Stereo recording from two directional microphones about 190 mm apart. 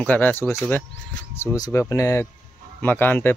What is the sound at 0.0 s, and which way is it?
Speech, 10° left (ahead or behind).